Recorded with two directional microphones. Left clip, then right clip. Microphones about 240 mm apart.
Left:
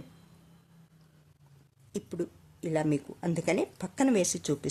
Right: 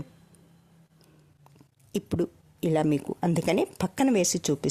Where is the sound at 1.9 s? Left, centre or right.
Right.